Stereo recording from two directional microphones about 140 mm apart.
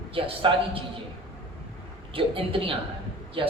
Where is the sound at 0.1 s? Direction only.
40° right (ahead or behind).